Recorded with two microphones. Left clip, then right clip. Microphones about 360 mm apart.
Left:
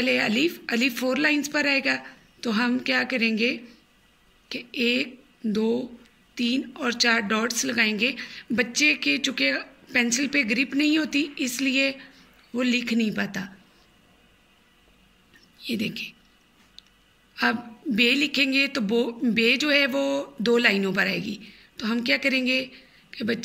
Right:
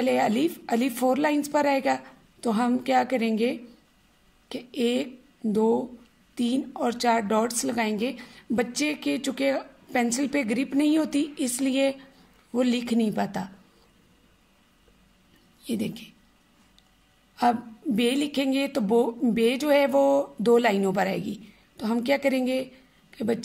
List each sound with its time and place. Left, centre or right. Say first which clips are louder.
0.0 s a woman's voice: left 1 dB; right
15.6 s a man's voice: left 3 dB; right
17.4 s a woman's voice: right 1 dB; right